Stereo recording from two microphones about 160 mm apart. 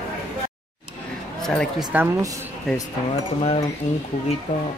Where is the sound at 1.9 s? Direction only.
10° right (ahead or behind).